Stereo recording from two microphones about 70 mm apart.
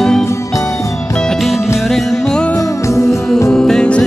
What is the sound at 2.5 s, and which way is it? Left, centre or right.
Music, left.